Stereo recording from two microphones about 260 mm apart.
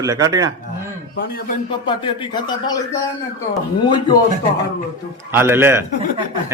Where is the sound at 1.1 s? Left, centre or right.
Left.